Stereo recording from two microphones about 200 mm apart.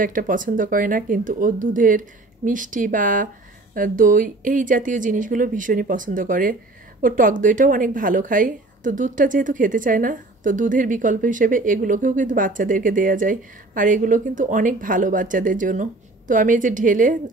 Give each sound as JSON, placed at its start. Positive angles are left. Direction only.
{"t": 0.0, "sound": "a woman's voice", "side_deg": -40}